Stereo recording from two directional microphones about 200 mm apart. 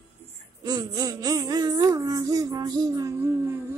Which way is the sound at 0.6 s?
20° right (ahead or behind).